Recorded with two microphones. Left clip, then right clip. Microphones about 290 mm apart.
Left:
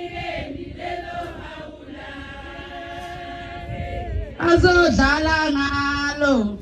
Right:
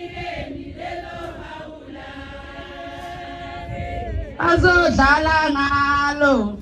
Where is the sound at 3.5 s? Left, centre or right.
Centre.